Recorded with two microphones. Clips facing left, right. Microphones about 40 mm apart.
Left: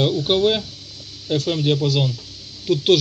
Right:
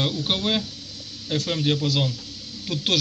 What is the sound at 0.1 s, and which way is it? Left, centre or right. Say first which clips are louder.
Speech: left 6 dB; left.